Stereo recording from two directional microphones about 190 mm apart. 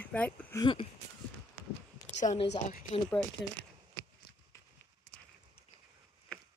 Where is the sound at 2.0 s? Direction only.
40° left (ahead or behind).